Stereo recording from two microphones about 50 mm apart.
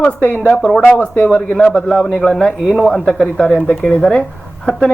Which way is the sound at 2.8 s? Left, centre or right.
Centre.